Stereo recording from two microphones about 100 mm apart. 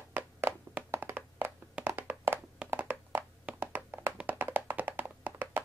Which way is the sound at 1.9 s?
25° right (ahead or behind).